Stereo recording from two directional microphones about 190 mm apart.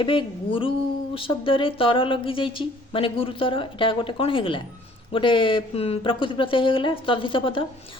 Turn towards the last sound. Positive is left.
turn(degrees=25)  # may be behind; listen again after turning